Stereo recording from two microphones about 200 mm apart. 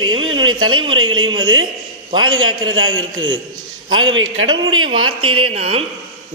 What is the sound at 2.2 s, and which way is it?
Speech, 90° right.